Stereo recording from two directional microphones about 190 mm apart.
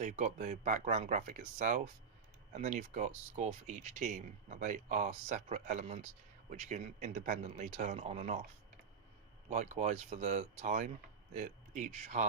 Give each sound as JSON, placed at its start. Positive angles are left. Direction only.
{"t": 0.0, "sound": "speech", "side_deg": -40}
{"t": 9.5, "sound": "speech", "side_deg": -40}